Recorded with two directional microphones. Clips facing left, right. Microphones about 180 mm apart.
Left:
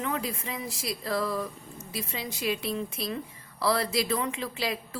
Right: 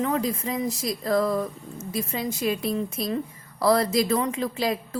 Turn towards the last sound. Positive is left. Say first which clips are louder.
# right 6 dB
turn(degrees=-40)  # may be behind; listen again after turning